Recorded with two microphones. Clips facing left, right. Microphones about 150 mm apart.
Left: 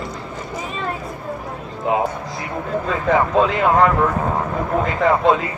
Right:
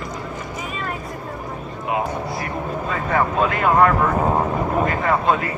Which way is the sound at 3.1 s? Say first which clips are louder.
Left 4 dB; 90° left.